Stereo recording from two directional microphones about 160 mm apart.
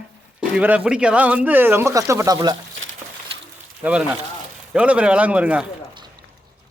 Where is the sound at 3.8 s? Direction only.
10° right (ahead or behind).